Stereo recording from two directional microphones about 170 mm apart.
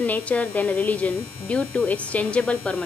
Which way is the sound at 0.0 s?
10° left (ahead or behind).